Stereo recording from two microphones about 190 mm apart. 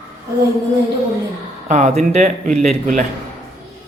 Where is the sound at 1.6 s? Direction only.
40° right (ahead or behind).